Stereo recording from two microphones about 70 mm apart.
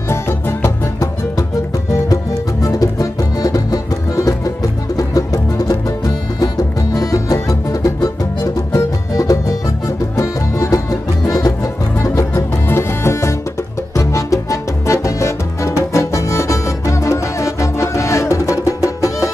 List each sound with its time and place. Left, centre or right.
2.6 s music: left
12.6 s music: left
13.9 s music: left